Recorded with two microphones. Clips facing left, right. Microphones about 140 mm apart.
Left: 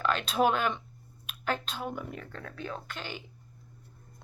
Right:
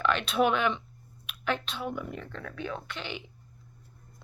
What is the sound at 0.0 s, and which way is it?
Speech, 40° left (ahead or behind).